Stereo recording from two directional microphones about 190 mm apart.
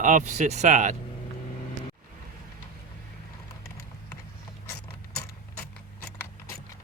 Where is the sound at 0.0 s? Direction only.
40° right (ahead or behind).